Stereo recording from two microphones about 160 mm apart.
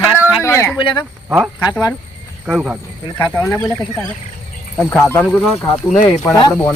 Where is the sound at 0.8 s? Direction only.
30° left (ahead or behind).